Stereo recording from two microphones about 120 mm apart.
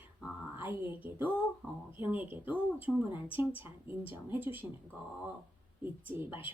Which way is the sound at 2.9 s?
5° left (ahead or behind).